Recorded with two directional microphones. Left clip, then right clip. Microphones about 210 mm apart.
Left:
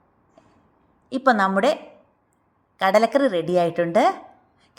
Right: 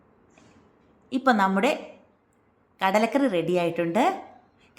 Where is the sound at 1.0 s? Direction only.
25° left (ahead or behind).